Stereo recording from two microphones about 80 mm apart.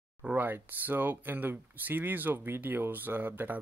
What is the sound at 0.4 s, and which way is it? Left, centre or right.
Speech, right.